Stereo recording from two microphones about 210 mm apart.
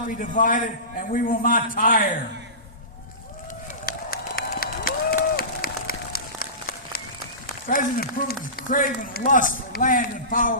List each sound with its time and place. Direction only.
0.2 s a man's voice: 40° left (ahead or behind)
3.8 s run: 45° left (ahead or behind)
7.7 s a man's voice: 45° left (ahead or behind)